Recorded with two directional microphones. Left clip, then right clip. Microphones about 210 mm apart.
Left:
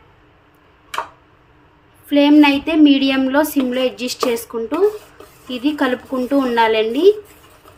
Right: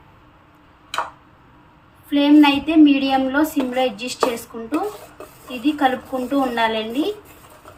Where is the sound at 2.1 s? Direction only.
55° left (ahead or behind).